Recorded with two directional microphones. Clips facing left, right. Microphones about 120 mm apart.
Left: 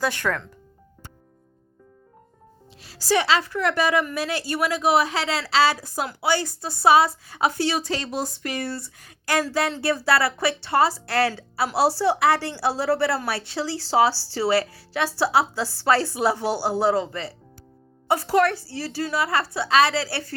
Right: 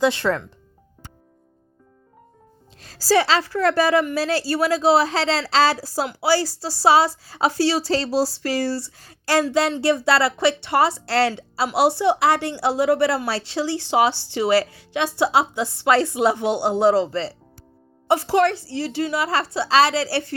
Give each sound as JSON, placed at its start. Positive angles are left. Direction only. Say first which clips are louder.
{"t": 0.0, "sound": "a woman's voice", "louder": "right 5 dB", "side_deg": -25}
{"t": 2.8, "sound": "a woman's voice", "louder": "right 4 dB", "side_deg": -40}